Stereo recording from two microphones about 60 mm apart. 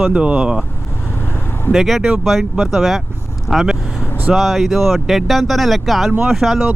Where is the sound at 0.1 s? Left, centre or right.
Centre.